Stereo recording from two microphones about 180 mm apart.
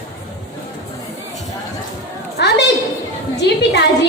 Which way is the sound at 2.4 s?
70° left (ahead or behind).